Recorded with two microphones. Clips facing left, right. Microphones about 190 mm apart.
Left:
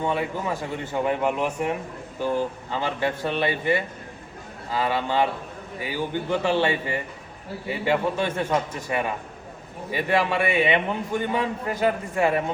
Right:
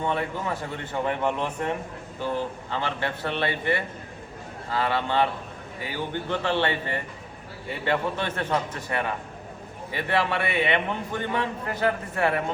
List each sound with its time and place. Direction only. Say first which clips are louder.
0.0 s a man's voice: left 2 dB; 10° left (ahead or behind)